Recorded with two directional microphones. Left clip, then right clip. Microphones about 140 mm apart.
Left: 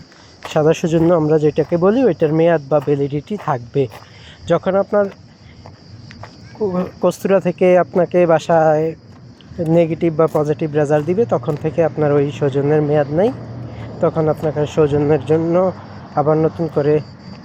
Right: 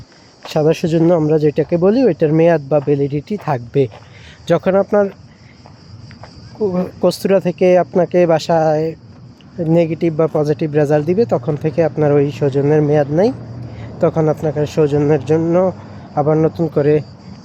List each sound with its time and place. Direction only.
0.5 s speech: 20° right (ahead or behind)
2.1 s speech: 40° right (ahead or behind)
6.8 s speech: 25° right (ahead or behind)